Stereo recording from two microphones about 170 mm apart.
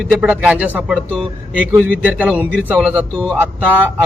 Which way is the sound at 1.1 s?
5° left (ahead or behind).